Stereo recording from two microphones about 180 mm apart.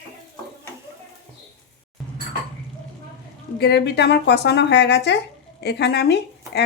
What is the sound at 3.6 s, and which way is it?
A woman's voice, 65° left (ahead or behind).